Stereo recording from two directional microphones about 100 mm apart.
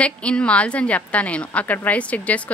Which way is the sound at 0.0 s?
10° left (ahead or behind).